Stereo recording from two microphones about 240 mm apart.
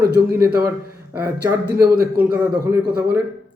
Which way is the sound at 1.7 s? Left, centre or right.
Right.